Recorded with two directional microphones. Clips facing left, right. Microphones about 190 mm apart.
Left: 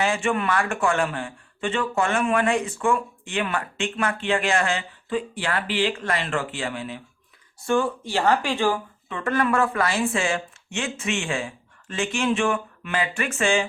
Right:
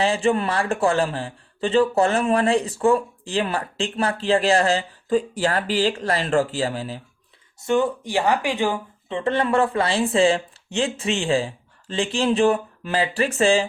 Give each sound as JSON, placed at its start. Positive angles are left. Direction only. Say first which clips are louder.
{"t": 0.0, "sound": "speech", "louder": "right 3 dB", "side_deg": -35}
{"t": 7.7, "sound": "speech", "louder": "right 2 dB", "side_deg": -15}